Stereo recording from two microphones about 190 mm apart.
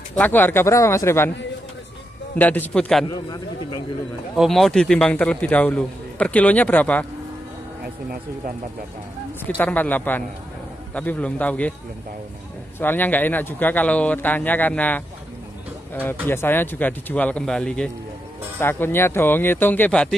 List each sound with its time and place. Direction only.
0.2 s a man's voice: 10° left (ahead or behind)
2.3 s a man's voice: 10° left (ahead or behind)
3.1 s a man's voice: 20° left (ahead or behind)
4.4 s a man's voice: centre (ahead or behind)
9.6 s a man's voice: 10° left (ahead or behind)
12.7 s a man's voice: 10° left (ahead or behind)